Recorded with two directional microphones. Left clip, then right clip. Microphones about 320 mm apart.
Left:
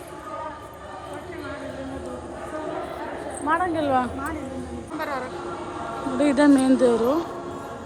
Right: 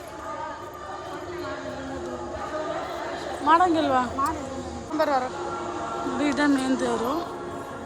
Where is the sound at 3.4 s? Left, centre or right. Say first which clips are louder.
Right 4 dB; centre.